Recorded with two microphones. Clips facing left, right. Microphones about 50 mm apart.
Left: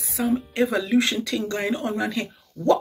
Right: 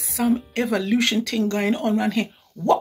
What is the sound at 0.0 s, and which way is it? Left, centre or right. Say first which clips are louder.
Speech: right 2 dB; right.